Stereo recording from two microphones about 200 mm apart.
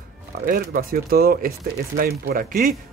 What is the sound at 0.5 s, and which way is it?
Speech, 45° right (ahead or behind).